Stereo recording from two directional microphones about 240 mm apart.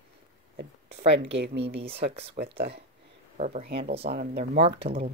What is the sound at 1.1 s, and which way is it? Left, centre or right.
Speech, right.